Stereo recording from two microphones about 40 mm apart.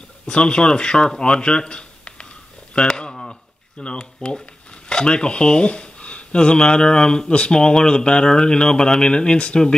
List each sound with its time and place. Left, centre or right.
0.3 s speech: left
2.7 s a sound: left
3.8 s speech: left